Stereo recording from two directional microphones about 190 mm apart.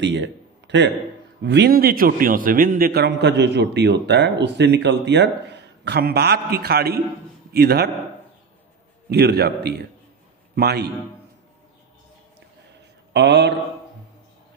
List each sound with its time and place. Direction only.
0.0 s a man's voice: 70° right (ahead or behind)
9.1 s a man's voice: 55° right (ahead or behind)
13.1 s a man's voice: 65° right (ahead or behind)